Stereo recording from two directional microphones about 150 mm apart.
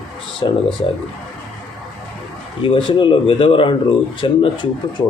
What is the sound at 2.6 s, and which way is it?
Speech, 35° left (ahead or behind).